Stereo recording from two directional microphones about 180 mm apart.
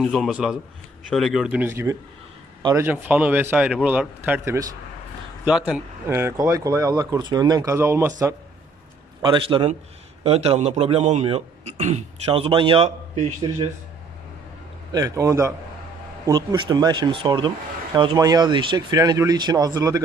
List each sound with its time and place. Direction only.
0.0 s a man's voice: centre (ahead or behind); by 8.1 s 15° right (ahead or behind)
9.2 s a man's voice: 25° right (ahead or behind)
14.9 s speech: 20° right (ahead or behind)